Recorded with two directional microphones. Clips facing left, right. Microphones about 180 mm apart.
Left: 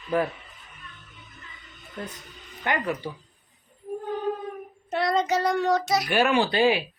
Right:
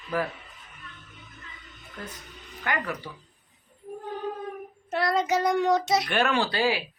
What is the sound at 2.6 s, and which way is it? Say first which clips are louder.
Speech: left 3 dB; 20° left (ahead or behind).